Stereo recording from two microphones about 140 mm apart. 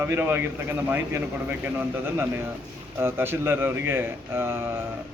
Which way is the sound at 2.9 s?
15° right (ahead or behind).